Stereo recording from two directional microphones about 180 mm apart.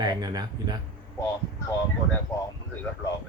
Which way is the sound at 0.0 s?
20° right (ahead or behind).